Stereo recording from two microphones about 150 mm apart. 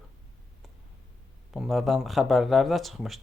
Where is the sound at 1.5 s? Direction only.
Centre (ahead or behind).